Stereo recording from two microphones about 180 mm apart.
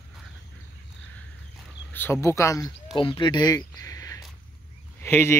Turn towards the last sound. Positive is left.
turn(degrees=10)  # may be behind; listen again after turning